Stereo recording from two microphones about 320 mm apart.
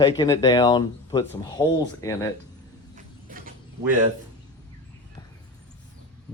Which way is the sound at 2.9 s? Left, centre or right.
Right.